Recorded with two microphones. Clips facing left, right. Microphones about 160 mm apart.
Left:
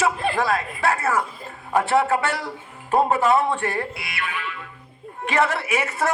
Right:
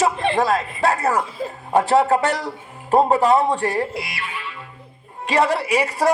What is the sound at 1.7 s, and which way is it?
A man's voice, 35° right (ahead or behind).